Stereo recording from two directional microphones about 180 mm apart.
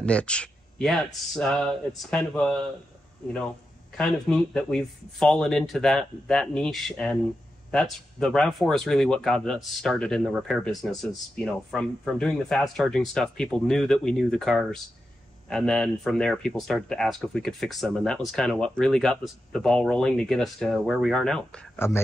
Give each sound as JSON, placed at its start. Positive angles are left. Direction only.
{"t": 0.0, "sound": "speech", "side_deg": 5}